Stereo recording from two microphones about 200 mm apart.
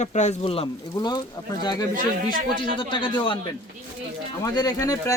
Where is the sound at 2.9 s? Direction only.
25° left (ahead or behind).